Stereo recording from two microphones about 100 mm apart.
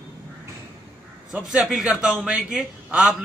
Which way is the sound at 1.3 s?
5° right (ahead or behind).